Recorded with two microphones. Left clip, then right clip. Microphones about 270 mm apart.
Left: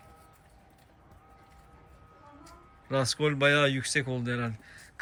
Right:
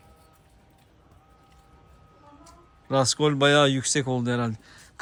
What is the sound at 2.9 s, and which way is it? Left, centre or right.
Speech, centre.